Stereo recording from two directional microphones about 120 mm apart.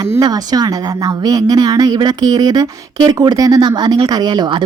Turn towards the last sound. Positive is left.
turn(degrees=-35)  # may be behind; listen again after turning